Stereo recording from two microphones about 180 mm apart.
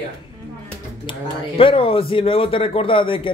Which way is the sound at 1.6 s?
30° left (ahead or behind).